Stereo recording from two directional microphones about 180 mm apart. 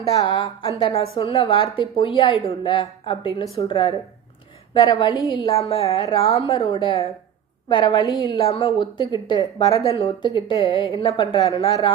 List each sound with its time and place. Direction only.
0.2 s a woman's voice: 25° left (ahead or behind)